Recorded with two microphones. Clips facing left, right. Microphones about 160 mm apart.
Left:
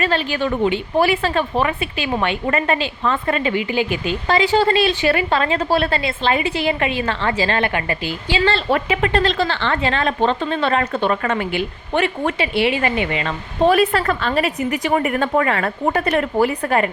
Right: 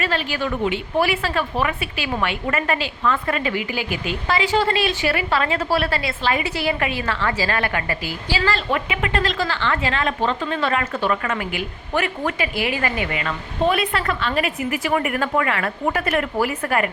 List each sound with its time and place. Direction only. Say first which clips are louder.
0.0 s a woman's voice: left 4 dB; 30° left (ahead or behind)